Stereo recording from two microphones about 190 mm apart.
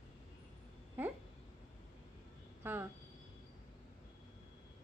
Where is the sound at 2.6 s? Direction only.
10° right (ahead or behind).